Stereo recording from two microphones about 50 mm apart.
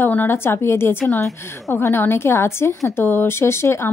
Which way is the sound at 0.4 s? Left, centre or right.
Left.